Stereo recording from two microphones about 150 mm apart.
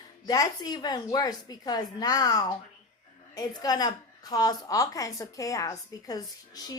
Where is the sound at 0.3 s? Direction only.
25° left (ahead or behind).